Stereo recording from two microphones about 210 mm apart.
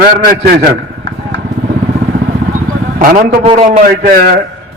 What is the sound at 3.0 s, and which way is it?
Speech, 40° right (ahead or behind).